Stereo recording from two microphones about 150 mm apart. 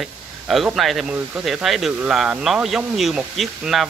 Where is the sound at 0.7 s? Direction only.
Centre (ahead or behind).